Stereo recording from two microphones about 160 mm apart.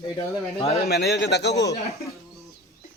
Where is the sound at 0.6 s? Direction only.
40° left (ahead or behind).